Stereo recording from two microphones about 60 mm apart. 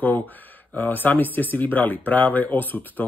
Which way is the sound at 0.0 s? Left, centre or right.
Left.